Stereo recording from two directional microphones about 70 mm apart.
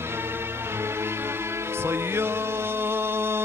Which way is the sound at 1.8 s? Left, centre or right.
Right.